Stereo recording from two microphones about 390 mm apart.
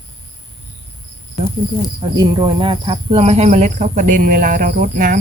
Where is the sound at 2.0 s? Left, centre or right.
Centre.